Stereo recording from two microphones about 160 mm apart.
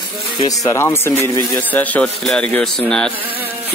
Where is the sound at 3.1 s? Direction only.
10° right (ahead or behind).